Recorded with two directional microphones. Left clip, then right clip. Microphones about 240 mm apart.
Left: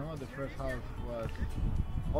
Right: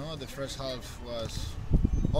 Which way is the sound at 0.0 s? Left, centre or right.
Centre.